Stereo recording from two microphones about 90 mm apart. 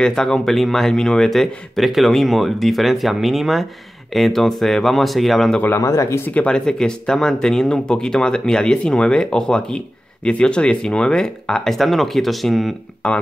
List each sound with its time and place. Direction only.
0.0 s speech: 5° left (ahead or behind)
5.8 s speech: 35° left (ahead or behind)
6.2 s speech: 15° left (ahead or behind)